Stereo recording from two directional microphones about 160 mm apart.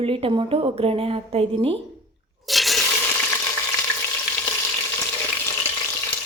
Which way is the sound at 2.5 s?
Centre (ahead or behind).